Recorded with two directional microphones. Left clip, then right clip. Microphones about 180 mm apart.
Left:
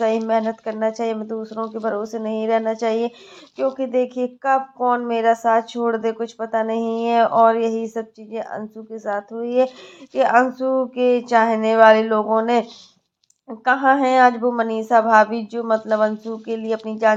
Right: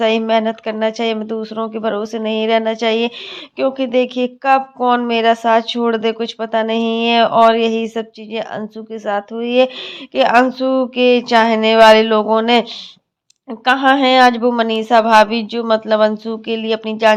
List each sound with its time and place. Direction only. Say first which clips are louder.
0.0 s speech: right 5 dB; 20° right (ahead or behind)